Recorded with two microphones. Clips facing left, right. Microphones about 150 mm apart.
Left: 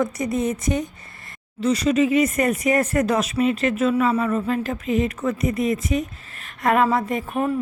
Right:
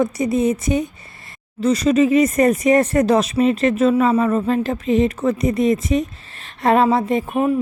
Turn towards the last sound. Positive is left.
turn(degrees=-15)  # may be behind; listen again after turning